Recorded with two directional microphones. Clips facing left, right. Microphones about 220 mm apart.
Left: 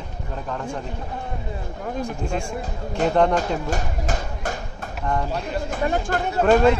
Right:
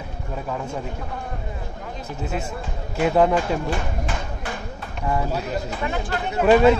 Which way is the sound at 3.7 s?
45° left (ahead or behind).